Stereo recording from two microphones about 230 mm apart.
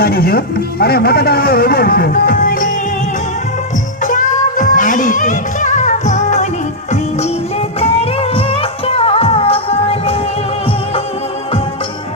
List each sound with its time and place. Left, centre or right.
0.0 s speech: left
4.0 s music: left
7.8 s music: left